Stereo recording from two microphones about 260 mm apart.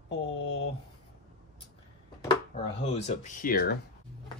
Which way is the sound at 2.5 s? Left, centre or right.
Left.